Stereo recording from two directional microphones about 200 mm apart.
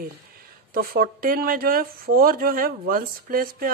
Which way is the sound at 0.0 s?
45° right (ahead or behind).